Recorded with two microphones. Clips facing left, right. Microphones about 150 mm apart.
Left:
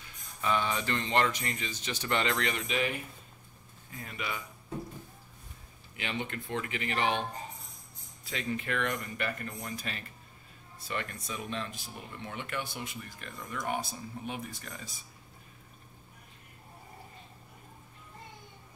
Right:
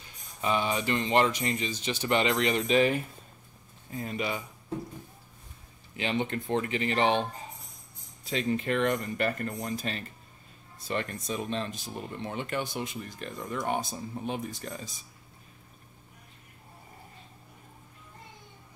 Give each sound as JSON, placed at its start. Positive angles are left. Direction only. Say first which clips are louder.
{"t": 0.4, "sound": "speech", "louder": "right 2 dB", "side_deg": -20}
{"t": 2.5, "sound": "speech", "louder": "right 8 dB", "side_deg": -35}
{"t": 5.9, "sound": "speech", "louder": "right 7 dB", "side_deg": -30}
{"t": 8.3, "sound": "speech", "louder": "right 6 dB", "side_deg": -30}
{"t": 9.7, "sound": "speech", "louder": "right 6 dB", "side_deg": -30}